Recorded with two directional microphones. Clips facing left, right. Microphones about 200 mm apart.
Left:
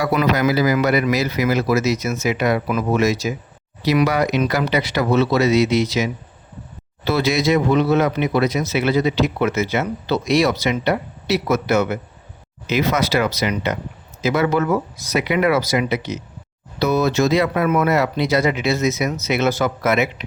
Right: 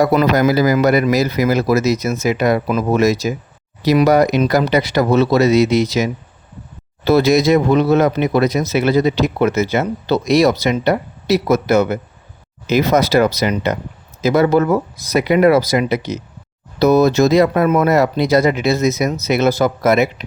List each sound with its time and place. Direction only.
0.0 s speech: 40° right (ahead or behind)